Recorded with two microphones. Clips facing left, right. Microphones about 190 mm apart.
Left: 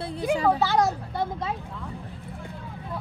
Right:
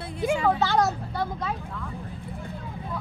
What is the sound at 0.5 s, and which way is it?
Speech, 10° left (ahead or behind).